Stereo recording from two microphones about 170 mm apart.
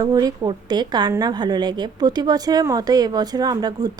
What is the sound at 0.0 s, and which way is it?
A woman's voice, 20° right (ahead or behind).